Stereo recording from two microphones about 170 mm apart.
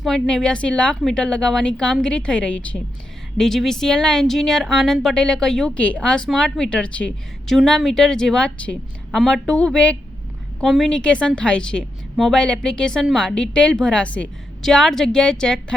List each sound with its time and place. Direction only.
0.0 s speech: centre (ahead or behind)